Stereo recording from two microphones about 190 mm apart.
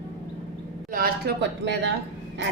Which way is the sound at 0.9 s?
55° right (ahead or behind).